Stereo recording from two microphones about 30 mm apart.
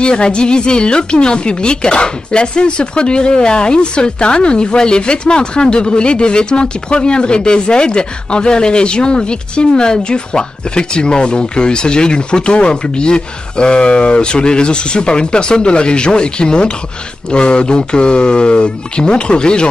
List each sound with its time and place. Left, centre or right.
0.0 s a woman's voice: left